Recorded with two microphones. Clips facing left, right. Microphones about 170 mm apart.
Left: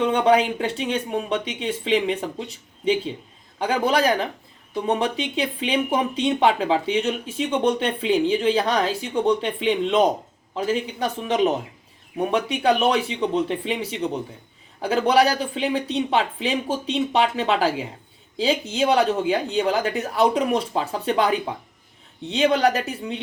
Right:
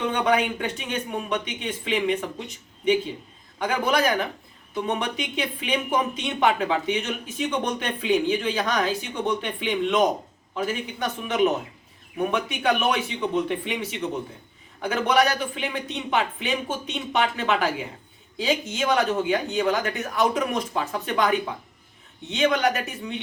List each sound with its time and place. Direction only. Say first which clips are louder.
0.1 s speech: left 4 dB; 30° left (ahead or behind)
3.6 s speech: left 2 dB; 30° left (ahead or behind)